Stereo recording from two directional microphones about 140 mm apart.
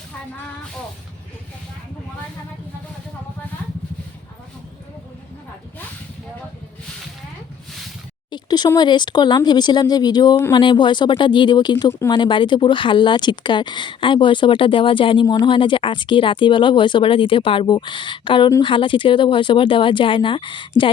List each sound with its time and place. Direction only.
8.3 s speech: 30° left (ahead or behind)
11.9 s speech: 20° left (ahead or behind)
12.1 s speech: 35° left (ahead or behind)